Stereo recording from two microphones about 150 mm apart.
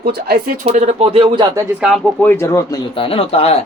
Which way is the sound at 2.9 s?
35° left (ahead or behind).